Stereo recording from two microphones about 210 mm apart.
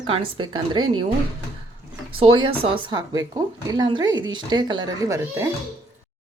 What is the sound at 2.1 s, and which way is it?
Speech, 25° right (ahead or behind).